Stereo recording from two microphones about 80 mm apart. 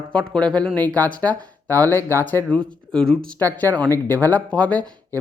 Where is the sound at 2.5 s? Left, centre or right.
Centre.